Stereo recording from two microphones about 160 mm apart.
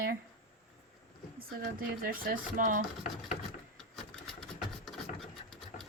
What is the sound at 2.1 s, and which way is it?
Speech, 60° right (ahead or behind).